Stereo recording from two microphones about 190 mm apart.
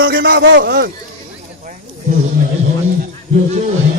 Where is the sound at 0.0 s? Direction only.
65° right (ahead or behind).